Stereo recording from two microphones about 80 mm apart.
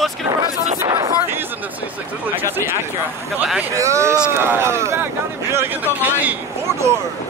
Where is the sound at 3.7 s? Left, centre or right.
Right.